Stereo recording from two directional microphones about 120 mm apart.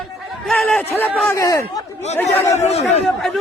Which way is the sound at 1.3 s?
25° left (ahead or behind).